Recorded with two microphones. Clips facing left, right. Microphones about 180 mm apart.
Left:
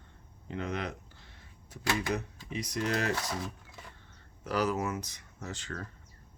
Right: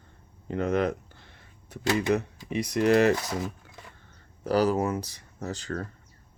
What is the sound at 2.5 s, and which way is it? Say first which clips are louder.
Speech: right 10 dB; 65° right (ahead or behind).